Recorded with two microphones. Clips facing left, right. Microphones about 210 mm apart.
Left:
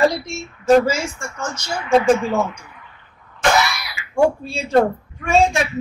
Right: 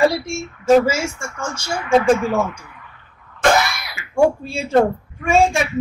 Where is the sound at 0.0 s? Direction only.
10° right (ahead or behind).